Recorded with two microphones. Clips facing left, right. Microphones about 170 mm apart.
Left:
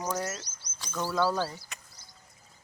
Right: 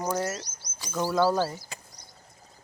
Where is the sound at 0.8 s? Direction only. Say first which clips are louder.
Right 4 dB; 10° right (ahead or behind).